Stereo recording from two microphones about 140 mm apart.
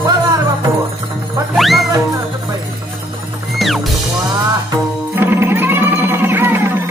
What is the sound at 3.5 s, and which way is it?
Music, centre (ahead or behind).